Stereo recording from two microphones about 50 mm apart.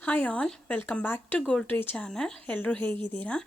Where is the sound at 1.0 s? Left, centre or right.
Left.